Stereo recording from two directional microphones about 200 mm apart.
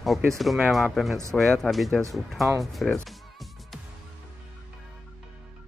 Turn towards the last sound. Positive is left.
turn(degrees=0)  # may be behind; listen again after turning